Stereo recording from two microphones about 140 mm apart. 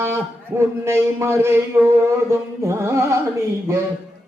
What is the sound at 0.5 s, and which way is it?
A man's voice, 20° right (ahead or behind).